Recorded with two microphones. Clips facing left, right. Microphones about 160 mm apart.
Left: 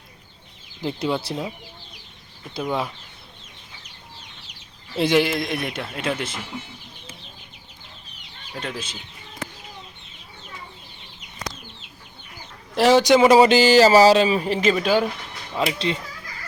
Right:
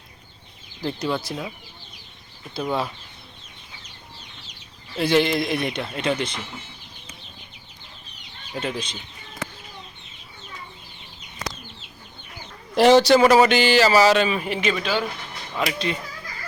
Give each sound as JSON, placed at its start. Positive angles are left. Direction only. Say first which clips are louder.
{"t": 0.8, "sound": "speech", "louder": "left 1 dB", "side_deg": 20}
{"t": 4.9, "sound": "a man's voice", "louder": "even", "side_deg": 15}
{"t": 8.5, "sound": "a man's voice", "louder": "right 3 dB", "side_deg": 0}
{"t": 12.7, "sound": "a man's voice", "louder": "right 2 dB", "side_deg": 0}
{"t": 13.0, "sound": "speech", "louder": "left 1 dB", "side_deg": 15}
{"t": 15.5, "sound": "speech", "louder": "left 2 dB", "side_deg": 25}